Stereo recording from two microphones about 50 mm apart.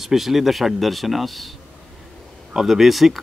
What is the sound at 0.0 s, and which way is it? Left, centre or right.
Speech, centre.